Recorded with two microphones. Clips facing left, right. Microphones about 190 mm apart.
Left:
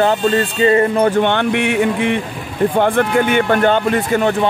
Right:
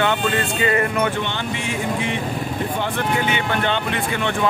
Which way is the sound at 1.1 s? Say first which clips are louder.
Left 10 dB; 55° left (ahead or behind).